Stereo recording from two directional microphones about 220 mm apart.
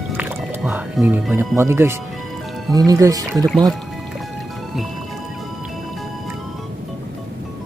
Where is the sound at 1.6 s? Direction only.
10° right (ahead or behind).